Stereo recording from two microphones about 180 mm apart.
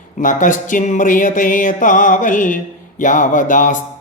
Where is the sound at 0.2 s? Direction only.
45° left (ahead or behind).